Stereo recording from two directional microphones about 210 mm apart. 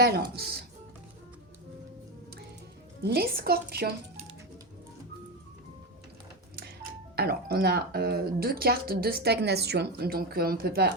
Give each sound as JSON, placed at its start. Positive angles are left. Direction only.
{"t": 0.0, "sound": "speech", "side_deg": -50}
{"t": 3.0, "sound": "speech", "side_deg": -45}
{"t": 7.2, "sound": "speech", "side_deg": -45}